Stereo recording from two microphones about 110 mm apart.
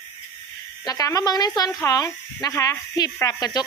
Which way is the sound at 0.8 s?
35° left (ahead or behind).